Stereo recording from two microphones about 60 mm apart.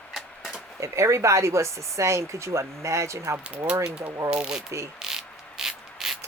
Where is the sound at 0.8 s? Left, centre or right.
Right.